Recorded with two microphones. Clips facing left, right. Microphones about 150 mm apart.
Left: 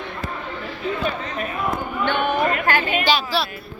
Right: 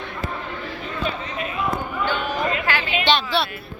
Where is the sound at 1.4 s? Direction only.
45° left (ahead or behind).